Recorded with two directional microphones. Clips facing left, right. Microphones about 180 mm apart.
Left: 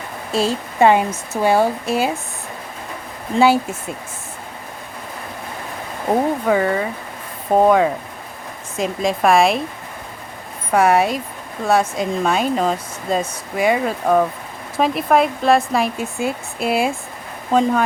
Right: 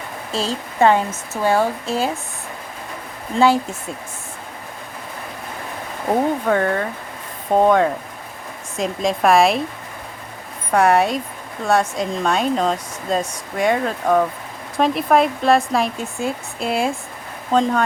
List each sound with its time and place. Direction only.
0.3 s a woman's voice: 10° left (ahead or behind)
3.3 s a woman's voice: 5° left (ahead or behind)
6.1 s speech: 5° left (ahead or behind)
10.7 s speech: centre (ahead or behind)